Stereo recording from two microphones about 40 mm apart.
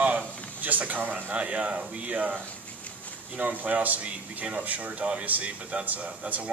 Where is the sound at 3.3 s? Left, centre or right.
Right.